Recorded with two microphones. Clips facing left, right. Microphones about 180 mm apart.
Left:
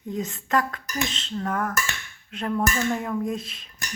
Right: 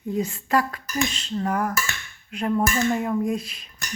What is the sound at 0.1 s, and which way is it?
Speech, 5° right (ahead or behind).